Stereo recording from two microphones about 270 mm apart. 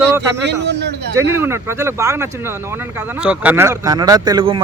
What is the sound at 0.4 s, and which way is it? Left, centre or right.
Speech, right.